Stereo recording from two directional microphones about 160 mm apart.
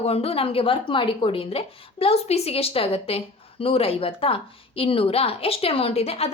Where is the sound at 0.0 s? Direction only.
40° left (ahead or behind).